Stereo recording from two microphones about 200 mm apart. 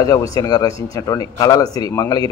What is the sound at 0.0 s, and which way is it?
Speech, 15° left (ahead or behind).